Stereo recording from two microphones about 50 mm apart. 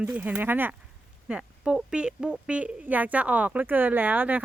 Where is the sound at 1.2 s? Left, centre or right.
Centre.